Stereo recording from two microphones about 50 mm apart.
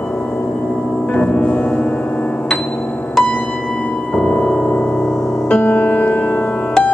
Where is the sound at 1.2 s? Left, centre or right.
Left.